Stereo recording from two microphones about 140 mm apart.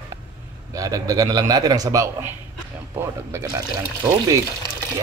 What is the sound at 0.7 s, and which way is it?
Speech, 25° right (ahead or behind).